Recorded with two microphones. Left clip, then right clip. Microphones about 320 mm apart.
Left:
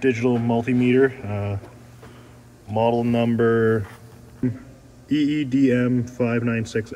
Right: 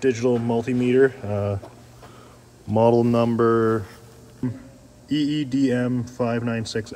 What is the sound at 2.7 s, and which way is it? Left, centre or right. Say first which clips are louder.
Speech: right 3 dB; right.